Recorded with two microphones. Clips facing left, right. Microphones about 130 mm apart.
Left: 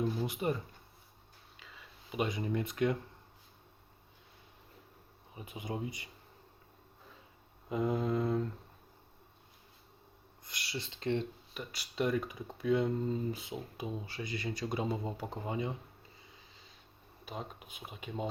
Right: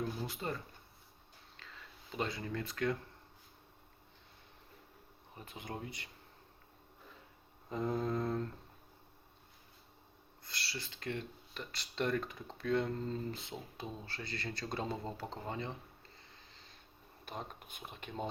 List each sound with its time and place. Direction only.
0.2 s speech: 15° left (ahead or behind)
1.5 s speech: 5° left (ahead or behind)
5.3 s speech: 10° left (ahead or behind)
7.7 s speech: 10° left (ahead or behind)
10.4 s speech: 15° left (ahead or behind)
11.5 s speech: 10° left (ahead or behind)
17.2 s speech: 5° left (ahead or behind)